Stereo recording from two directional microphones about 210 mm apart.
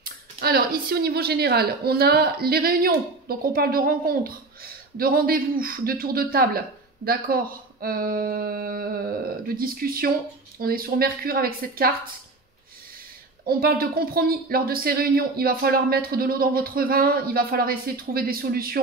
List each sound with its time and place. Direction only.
0.0 s speech: 45° right (ahead or behind)
13.5 s speech: 45° right (ahead or behind)